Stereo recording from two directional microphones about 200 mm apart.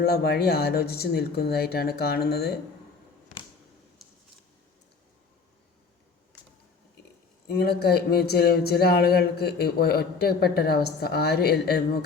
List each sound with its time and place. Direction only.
0.0 s speech: 50° left (ahead or behind)
4.0 s a sound: centre (ahead or behind)
7.4 s speech: 55° left (ahead or behind)